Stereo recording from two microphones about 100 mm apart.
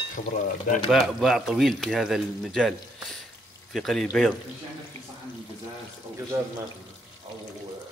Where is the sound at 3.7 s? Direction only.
Centre (ahead or behind).